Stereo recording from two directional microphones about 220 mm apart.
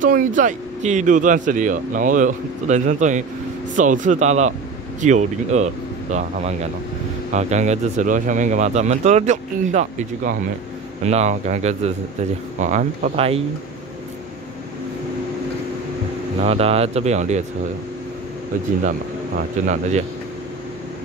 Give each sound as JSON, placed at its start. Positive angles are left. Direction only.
{"t": 0.0, "sound": "speech", "side_deg": -35}
{"t": 16.4, "sound": "speech", "side_deg": -25}
{"t": 19.6, "sound": "speech", "side_deg": -35}